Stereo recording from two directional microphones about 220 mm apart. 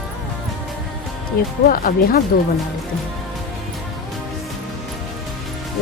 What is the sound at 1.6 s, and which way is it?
Speech, 40° left (ahead or behind).